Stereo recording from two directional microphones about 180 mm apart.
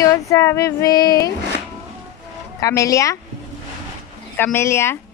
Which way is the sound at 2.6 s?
20° left (ahead or behind).